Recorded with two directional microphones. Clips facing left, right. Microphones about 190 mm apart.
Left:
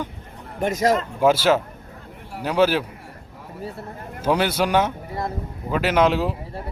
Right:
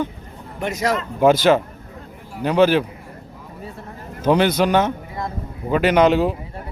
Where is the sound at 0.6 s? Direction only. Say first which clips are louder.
Left 2 dB; 50° left (ahead or behind).